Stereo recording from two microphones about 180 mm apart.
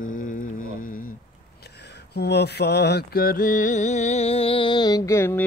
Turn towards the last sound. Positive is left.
turn(degrees=15)  # may be behind; listen again after turning